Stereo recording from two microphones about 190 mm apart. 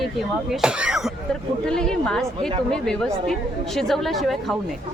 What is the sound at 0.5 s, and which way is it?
A woman's voice, 5° right (ahead or behind).